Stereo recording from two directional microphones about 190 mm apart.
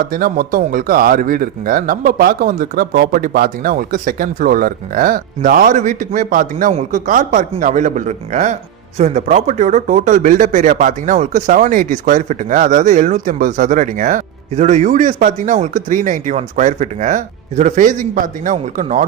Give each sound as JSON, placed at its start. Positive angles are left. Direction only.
{"t": 0.0, "sound": "speech", "side_deg": -50}